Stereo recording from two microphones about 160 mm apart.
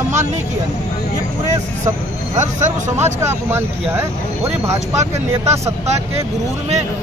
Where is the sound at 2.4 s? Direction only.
45° right (ahead or behind).